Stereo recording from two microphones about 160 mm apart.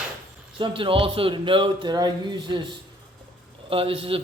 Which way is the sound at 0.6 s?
30° right (ahead or behind).